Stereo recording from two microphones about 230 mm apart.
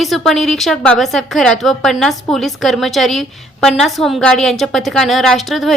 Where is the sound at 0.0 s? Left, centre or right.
Centre.